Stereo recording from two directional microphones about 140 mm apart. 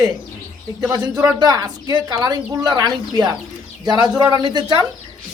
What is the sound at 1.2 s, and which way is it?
A woman's voice, 25° right (ahead or behind).